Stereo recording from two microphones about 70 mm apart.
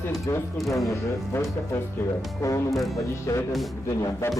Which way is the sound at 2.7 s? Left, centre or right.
Centre.